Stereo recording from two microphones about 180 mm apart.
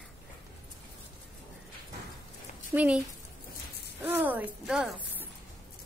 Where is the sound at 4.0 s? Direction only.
10° right (ahead or behind).